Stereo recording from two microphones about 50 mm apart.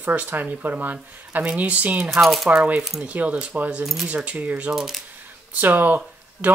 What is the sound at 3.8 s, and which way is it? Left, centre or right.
Speech, centre.